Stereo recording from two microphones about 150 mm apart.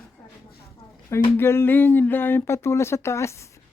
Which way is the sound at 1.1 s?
15° left (ahead or behind).